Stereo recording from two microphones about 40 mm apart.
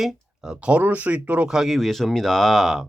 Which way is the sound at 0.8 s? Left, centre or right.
Right.